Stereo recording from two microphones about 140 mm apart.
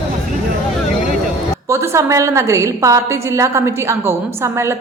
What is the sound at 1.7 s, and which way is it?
A woman's voice, 20° right (ahead or behind).